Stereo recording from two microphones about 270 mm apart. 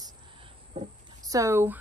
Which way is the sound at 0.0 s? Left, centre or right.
Centre.